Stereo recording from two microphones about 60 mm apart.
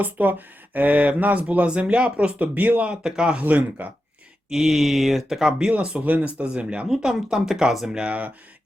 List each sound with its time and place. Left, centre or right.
0.0 s speech: right; by 3.4 s centre
3.4 s speech: right
4.4 s speech: centre
7.9 s speech: right